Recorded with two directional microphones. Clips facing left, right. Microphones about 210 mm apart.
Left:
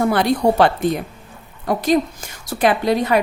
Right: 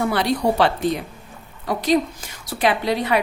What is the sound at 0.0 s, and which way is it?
A woman's voice, 50° left (ahead or behind).